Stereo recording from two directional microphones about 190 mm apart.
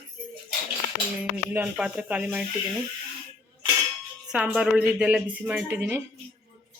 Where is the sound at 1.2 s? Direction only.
5° right (ahead or behind).